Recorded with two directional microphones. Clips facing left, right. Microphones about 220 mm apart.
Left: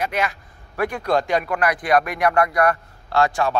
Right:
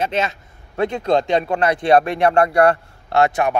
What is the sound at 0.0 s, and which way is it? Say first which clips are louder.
A man's voice: right 3 dB; 25° right (ahead or behind).